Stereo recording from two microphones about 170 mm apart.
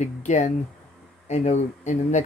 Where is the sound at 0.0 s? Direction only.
45° left (ahead or behind).